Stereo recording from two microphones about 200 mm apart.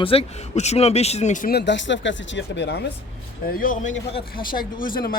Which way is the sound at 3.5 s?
45° left (ahead or behind).